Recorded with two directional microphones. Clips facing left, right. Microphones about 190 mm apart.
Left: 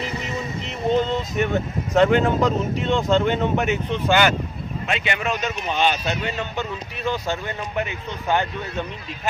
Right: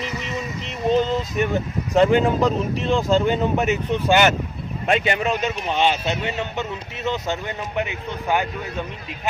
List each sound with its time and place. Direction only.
0.7 s speech: centre (ahead or behind)
4.8 s speech: 45° right (ahead or behind); by 8.5 s 10° right (ahead or behind)